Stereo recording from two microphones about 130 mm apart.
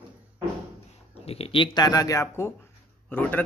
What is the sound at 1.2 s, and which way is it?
Speech, 50° left (ahead or behind).